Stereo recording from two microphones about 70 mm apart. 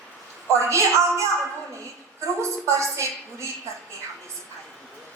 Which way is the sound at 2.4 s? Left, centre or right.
Right.